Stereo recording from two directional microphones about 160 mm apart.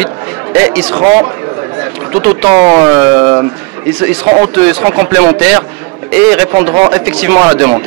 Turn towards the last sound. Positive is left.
turn(degrees=-20)  # may be behind; listen again after turning